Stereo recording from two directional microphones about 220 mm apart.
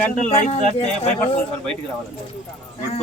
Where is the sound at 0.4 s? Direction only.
30° left (ahead or behind).